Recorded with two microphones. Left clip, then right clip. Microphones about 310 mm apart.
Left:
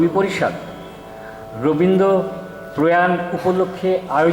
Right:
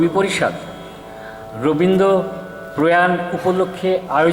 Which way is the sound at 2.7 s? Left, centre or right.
Centre.